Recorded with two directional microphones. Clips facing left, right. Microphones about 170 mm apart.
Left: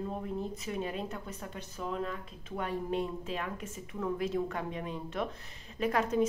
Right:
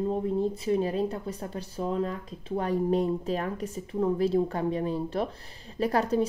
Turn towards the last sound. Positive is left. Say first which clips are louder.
# right 4 dB
turn(degrees=-35)  # may be behind; listen again after turning